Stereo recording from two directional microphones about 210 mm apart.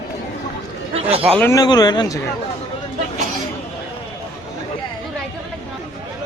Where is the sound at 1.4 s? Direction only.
15° left (ahead or behind).